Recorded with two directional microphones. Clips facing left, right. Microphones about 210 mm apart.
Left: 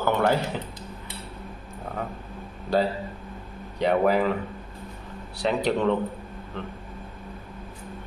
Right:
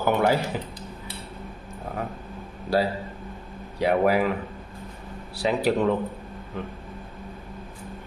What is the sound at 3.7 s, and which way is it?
Speech, 10° right (ahead or behind).